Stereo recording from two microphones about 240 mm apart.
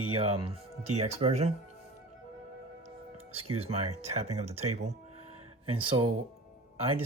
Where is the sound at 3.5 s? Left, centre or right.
Right.